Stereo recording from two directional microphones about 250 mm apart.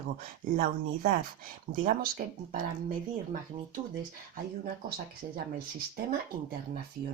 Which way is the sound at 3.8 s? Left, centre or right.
Right.